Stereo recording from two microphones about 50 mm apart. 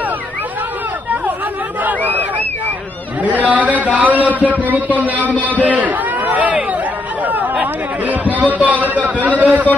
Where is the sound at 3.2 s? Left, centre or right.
Right.